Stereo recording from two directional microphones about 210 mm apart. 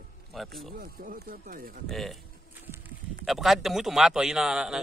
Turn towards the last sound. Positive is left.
turn(degrees=-5)  # may be behind; listen again after turning